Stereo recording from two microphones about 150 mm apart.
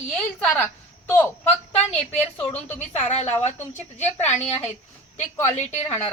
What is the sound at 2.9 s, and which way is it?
Speech, 45° left (ahead or behind).